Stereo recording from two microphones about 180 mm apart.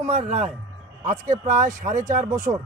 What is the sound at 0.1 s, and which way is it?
Speech, 35° right (ahead or behind).